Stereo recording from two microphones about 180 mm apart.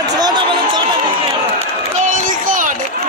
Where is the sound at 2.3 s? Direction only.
45° right (ahead or behind).